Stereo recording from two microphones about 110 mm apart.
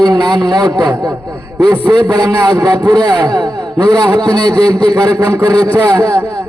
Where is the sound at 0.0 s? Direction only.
40° right (ahead or behind).